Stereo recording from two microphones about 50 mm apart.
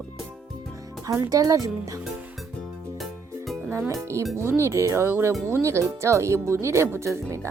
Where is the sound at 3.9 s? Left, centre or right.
Right.